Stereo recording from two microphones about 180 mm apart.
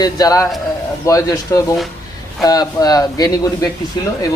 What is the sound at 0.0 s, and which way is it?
Speech, 20° left (ahead or behind).